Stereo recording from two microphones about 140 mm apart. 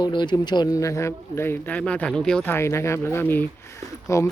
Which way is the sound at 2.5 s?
20° left (ahead or behind).